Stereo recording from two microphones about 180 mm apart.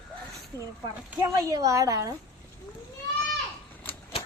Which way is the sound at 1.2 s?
20° right (ahead or behind).